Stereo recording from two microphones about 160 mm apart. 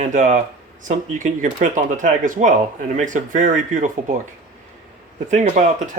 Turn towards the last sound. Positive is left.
turn(degrees=-50)  # may be behind; listen again after turning